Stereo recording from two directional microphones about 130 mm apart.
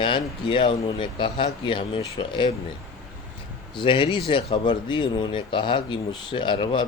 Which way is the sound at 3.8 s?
40° left (ahead or behind).